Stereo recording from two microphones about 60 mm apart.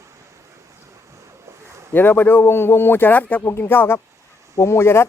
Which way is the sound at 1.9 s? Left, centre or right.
Left.